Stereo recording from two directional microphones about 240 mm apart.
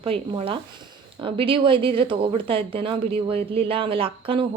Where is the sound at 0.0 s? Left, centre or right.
Right.